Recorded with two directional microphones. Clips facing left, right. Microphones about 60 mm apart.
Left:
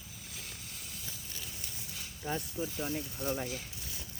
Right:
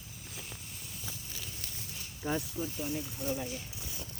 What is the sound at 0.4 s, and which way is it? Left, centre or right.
Vehicle, left.